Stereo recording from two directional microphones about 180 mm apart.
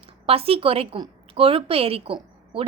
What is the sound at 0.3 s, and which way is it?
A woman's voice, 30° right (ahead or behind).